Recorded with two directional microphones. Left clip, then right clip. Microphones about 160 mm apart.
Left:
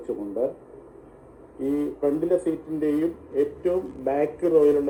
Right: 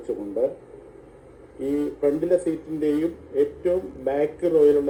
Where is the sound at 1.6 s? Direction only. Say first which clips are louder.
Right 1 dB; 15° left (ahead or behind).